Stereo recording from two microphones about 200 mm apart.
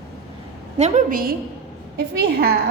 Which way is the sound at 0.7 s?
35° right (ahead or behind).